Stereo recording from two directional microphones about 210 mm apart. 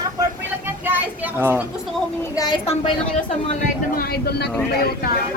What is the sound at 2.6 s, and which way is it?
Speech, 30° left (ahead or behind).